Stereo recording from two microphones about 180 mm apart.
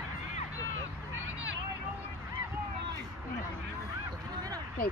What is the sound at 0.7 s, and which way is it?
Vehicle, 90° right.